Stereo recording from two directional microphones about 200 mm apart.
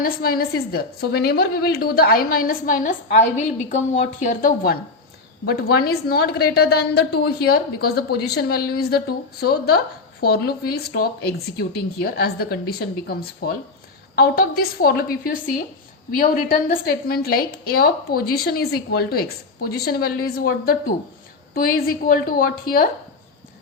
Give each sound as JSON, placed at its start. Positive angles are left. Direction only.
{"t": 0.0, "sound": "a woman's voice", "side_deg": 50}